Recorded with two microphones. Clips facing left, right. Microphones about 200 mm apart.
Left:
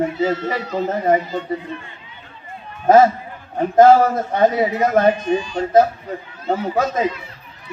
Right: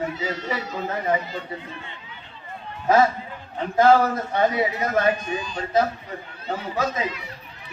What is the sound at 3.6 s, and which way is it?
A man's voice, 50° left (ahead or behind).